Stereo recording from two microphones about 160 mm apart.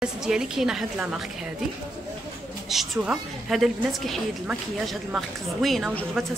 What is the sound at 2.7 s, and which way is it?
A woman's voice, 5° right (ahead or behind).